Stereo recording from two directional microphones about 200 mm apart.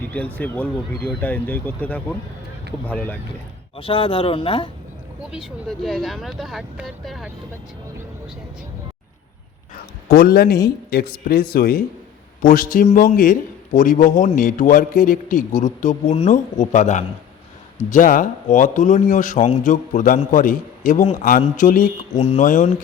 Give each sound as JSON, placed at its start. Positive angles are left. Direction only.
{"t": 0.3, "sound": "speech", "side_deg": 10}
{"t": 3.8, "sound": "speech", "side_deg": 25}
{"t": 5.3, "sound": "speech", "side_deg": 0}
{"t": 10.1, "sound": "a man's voice", "side_deg": 50}